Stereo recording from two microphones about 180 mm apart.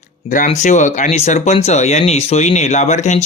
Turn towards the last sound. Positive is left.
turn(degrees=40)  # may be behind; listen again after turning